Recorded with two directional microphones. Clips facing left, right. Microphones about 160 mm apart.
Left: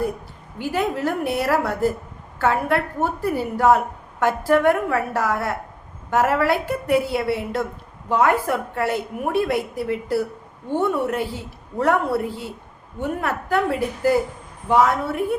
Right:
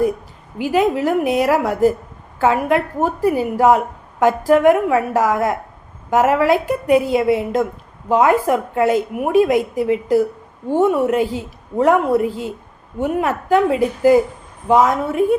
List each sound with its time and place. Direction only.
0.6 s a woman's voice: 15° right (ahead or behind)